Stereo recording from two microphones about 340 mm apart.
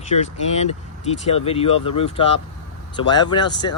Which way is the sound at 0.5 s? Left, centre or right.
Centre.